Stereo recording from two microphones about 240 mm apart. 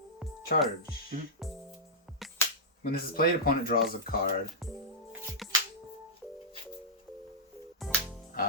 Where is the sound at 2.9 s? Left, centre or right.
Left.